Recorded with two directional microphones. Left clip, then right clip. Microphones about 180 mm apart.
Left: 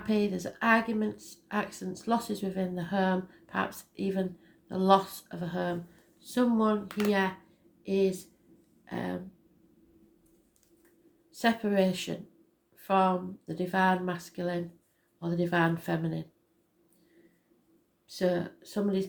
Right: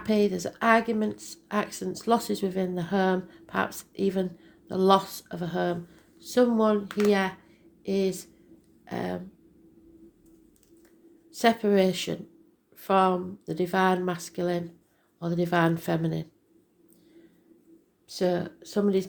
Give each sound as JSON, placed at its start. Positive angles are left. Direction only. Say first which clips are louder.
{"t": 0.0, "sound": "speech", "louder": "right 5 dB", "side_deg": -45}
{"t": 6.8, "sound": "speech", "louder": "right 6 dB", "side_deg": -5}
{"t": 7.1, "sound": "speech", "louder": "even", "side_deg": -45}
{"t": 8.8, "sound": "a sound", "louder": "right 4 dB", "side_deg": -45}
{"t": 11.3, "sound": "speech", "louder": "right 6 dB", "side_deg": -40}
{"t": 18.1, "sound": "speech", "louder": "right 2 dB", "side_deg": -40}